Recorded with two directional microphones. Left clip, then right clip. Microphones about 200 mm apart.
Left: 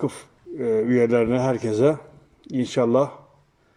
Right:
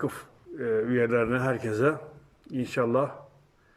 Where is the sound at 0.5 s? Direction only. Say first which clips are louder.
Left 6 dB; 35° left (ahead or behind).